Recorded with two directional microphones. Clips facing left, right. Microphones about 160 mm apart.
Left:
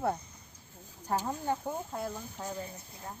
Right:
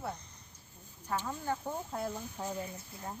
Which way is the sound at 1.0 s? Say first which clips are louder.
Left 4 dB; 40° left (ahead or behind).